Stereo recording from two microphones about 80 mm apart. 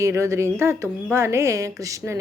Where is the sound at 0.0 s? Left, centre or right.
Right.